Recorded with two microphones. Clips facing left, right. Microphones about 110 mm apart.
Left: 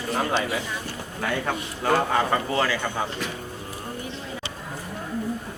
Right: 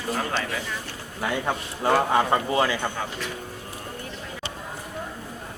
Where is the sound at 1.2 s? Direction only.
20° right (ahead or behind).